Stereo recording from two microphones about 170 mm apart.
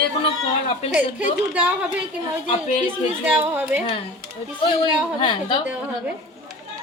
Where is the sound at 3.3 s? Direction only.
10° right (ahead or behind).